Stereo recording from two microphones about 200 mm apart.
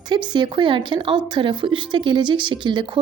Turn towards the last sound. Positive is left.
turn(degrees=-25)  # may be behind; listen again after turning